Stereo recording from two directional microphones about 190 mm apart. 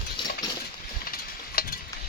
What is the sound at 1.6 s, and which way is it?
Stir, 50° left (ahead or behind).